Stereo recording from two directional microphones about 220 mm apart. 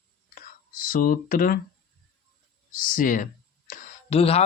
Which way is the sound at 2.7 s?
40° left (ahead or behind).